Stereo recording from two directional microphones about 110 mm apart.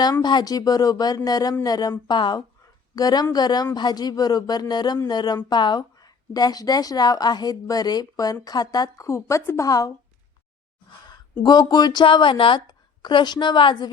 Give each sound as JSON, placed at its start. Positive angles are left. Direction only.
{"t": 0.0, "sound": "speech", "side_deg": 40}
{"t": 9.0, "sound": "a woman's voice", "side_deg": 25}
{"t": 11.4, "sound": "a woman's voice", "side_deg": 40}